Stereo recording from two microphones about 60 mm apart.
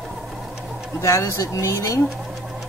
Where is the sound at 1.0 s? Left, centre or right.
Left.